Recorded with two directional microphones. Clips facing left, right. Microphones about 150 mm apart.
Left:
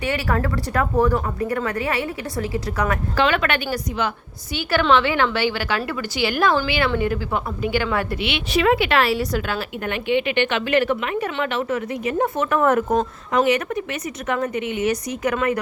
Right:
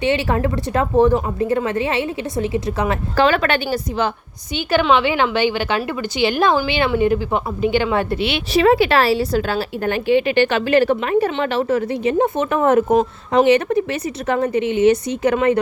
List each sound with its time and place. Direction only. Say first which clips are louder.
0.0 s a woman's voice: right 5 dB; 25° right (ahead or behind)
3.2 s speech: right 4 dB; 35° right (ahead or behind)
4.5 s a woman's voice: right 2 dB; 20° right (ahead or behind)
12.1 s a woman's voice: right 1 dB; 20° right (ahead or behind)